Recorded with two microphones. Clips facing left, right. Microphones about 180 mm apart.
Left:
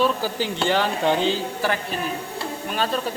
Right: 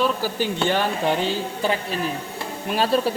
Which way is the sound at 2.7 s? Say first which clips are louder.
Right 5 dB; 35° right (ahead or behind).